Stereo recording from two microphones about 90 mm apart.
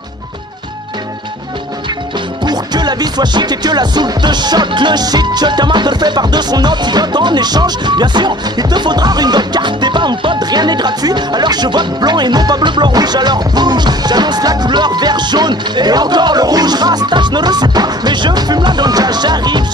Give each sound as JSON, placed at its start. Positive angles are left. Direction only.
{"t": 2.4, "sound": "music", "side_deg": -50}